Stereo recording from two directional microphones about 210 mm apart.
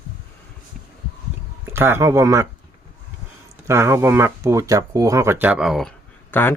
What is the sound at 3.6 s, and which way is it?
Speech, 10° right (ahead or behind).